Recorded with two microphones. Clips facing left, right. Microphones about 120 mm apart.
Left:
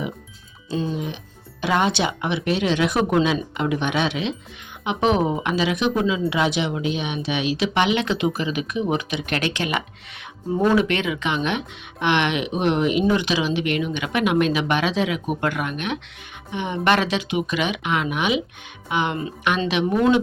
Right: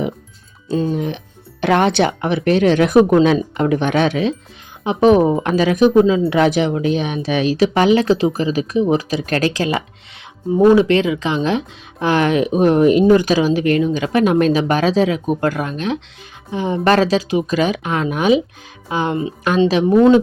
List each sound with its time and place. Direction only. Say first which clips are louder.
0.7 s speech: right 7 dB; 55° right (ahead or behind); by 20.1 s 35° right (ahead or behind)